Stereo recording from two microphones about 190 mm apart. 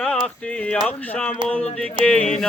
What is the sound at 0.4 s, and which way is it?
Speech, 5° left (ahead or behind).